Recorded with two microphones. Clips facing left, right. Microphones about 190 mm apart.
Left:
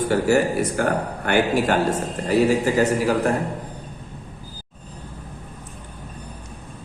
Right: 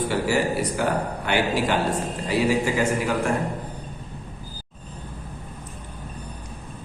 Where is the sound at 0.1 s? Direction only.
45° left (ahead or behind).